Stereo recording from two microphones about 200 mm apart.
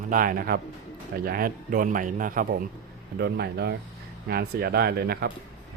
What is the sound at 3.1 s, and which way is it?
Speech, 55° right (ahead or behind).